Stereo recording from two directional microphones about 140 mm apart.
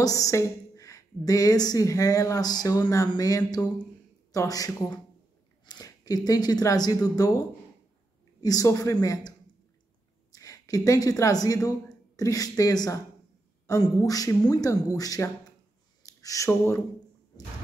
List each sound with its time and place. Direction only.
0.0 s a woman's voice: 25° left (ahead or behind)
10.3 s a woman's voice: 25° left (ahead or behind)